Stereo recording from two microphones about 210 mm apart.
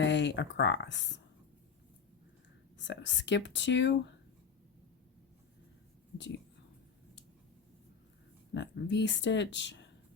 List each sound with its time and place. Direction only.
0.0 s speech: 60° left (ahead or behind)
2.7 s speech: 60° left (ahead or behind)
8.5 s speech: 55° left (ahead or behind)